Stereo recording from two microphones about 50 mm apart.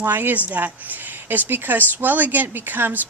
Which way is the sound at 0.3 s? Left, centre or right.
Right.